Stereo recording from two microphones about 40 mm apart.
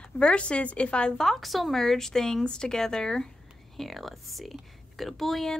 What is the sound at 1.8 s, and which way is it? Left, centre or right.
Speech, centre.